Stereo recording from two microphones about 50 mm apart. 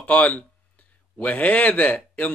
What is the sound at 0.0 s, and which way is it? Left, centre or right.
Speech, left.